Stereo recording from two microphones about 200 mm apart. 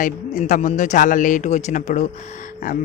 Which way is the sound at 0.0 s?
40° left (ahead or behind).